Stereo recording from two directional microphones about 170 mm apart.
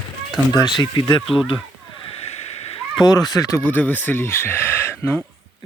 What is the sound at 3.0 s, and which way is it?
Speech, 20° left (ahead or behind).